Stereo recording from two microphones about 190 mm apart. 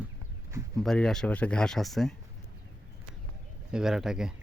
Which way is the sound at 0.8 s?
5° left (ahead or behind).